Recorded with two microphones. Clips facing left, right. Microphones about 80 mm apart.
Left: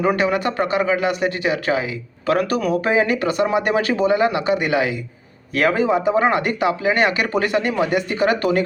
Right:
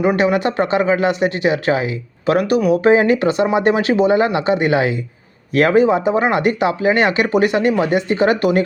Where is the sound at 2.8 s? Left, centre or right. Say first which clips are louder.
Right 7 dB; right.